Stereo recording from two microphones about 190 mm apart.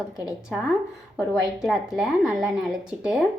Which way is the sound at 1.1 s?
5° right (ahead or behind).